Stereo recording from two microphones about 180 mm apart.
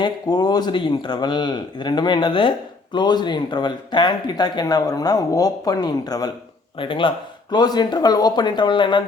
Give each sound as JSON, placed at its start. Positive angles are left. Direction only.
{"t": 0.0, "sound": "speech", "side_deg": 20}